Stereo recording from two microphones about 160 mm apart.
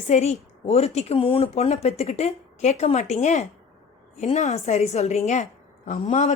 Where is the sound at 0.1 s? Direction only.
45° left (ahead or behind).